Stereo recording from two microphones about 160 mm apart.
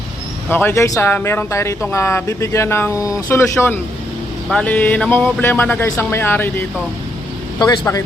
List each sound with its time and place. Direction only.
0.5 s speech: 15° left (ahead or behind)
7.6 s speech: 25° left (ahead or behind)